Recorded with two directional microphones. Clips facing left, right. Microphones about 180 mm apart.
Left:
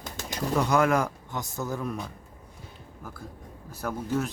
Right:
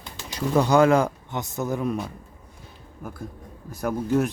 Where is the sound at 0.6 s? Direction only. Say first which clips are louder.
Right 6 dB; 30° right (ahead or behind).